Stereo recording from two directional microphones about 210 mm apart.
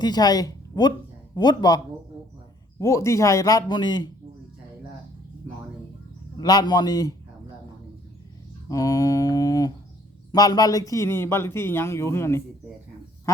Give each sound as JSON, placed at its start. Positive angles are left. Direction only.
{"t": 0.0, "sound": "a man's voice", "side_deg": 20}
{"t": 6.3, "sound": "a man's voice", "side_deg": 20}
{"t": 8.7, "sound": "speech", "side_deg": 15}